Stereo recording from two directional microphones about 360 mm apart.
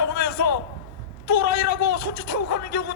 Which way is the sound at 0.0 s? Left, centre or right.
Left.